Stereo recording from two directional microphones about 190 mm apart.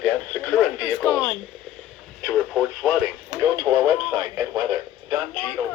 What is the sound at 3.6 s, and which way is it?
Radio, 15° right (ahead or behind).